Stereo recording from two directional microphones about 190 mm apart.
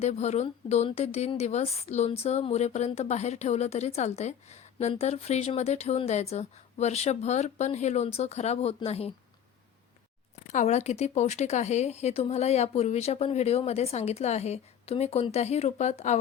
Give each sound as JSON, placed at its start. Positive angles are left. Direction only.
{"t": 0.0, "sound": "a woman's voice", "side_deg": 35}
{"t": 10.4, "sound": "a woman's voice", "side_deg": 40}